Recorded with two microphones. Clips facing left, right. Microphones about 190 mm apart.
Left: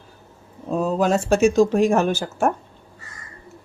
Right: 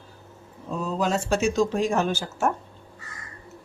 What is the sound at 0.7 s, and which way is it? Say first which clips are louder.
Speech: left 6 dB; 55° left (ahead or behind).